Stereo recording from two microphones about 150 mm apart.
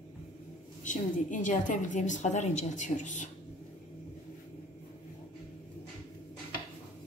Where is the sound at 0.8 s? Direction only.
55° left (ahead or behind).